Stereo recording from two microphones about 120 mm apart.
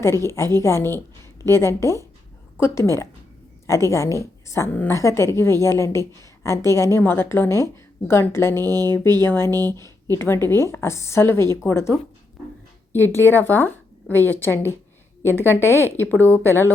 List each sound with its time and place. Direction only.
0.0 s a woman's voice: 20° left (ahead or behind)
8.6 s speech: 35° right (ahead or behind)
9.2 s a woman's voice: 20° left (ahead or behind)
9.5 s speech: 30° right (ahead or behind)
9.8 s a woman's voice: 20° left (ahead or behind)
13.1 s a woman's voice: 15° left (ahead or behind)